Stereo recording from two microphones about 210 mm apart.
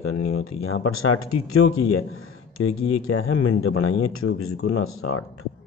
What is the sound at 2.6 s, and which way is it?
Speech, 85° left.